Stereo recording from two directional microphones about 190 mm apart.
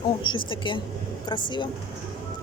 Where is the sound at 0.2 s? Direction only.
25° left (ahead or behind).